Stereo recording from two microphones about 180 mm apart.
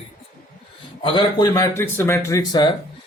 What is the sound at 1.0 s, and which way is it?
Speech, 25° left (ahead or behind).